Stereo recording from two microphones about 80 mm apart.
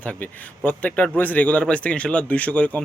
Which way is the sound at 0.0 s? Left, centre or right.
Centre.